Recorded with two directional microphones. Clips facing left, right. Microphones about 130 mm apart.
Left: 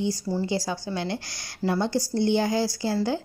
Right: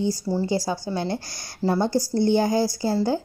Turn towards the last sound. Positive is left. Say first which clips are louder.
# right 3 dB
turn(degrees=-40)  # may be behind; listen again after turning